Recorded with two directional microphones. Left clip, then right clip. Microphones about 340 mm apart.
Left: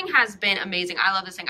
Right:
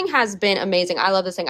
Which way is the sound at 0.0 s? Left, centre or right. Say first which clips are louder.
Right 2 dB; centre.